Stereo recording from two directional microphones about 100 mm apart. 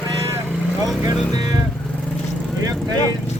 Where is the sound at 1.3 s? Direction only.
40° right (ahead or behind).